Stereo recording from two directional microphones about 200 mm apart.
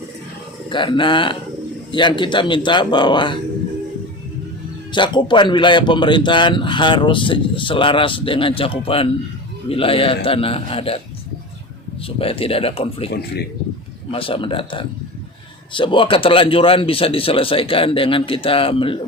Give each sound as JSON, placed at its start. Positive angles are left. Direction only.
{"t": 0.7, "sound": "a man's voice", "side_deg": 25}
{"t": 4.9, "sound": "a man's voice", "side_deg": 25}
{"t": 12.0, "sound": "a man's voice", "side_deg": 30}
{"t": 14.1, "sound": "a man's voice", "side_deg": 25}